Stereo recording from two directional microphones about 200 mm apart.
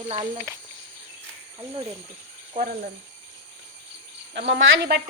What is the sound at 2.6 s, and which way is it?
Speech, 40° right (ahead or behind).